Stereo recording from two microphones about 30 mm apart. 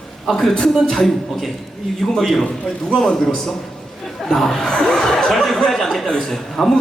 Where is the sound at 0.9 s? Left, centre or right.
Centre.